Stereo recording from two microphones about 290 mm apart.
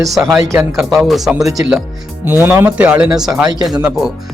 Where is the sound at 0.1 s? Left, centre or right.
Centre.